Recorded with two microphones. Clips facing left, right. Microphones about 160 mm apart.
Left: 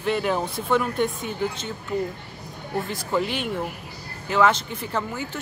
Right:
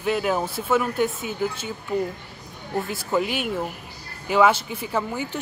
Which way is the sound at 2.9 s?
5° right (ahead or behind).